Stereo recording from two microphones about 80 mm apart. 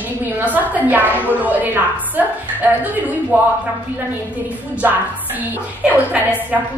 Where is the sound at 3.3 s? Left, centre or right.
Right.